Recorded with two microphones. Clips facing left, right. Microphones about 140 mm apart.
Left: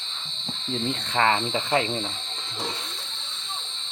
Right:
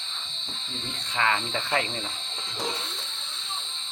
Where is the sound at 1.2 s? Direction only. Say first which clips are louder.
Left 4 dB; 30° left (ahead or behind).